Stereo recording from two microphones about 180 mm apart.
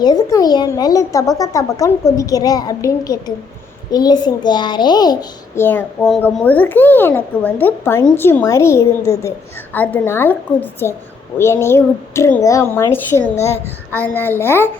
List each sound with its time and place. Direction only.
0.0 s a child's voice: 20° left (ahead or behind)
5.5 s a child's voice: 10° left (ahead or behind)